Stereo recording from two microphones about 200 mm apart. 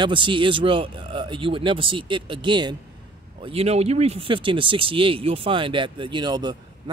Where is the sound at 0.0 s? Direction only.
25° right (ahead or behind).